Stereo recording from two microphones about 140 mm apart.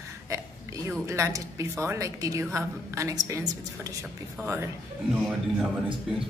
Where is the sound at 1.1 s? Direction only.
20° right (ahead or behind).